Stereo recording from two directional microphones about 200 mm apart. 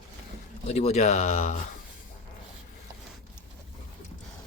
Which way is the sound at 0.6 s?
35° left (ahead or behind).